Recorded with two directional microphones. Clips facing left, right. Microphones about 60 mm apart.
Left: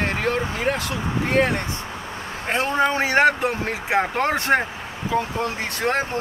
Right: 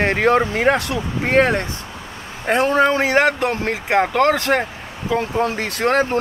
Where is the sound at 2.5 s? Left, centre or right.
Right.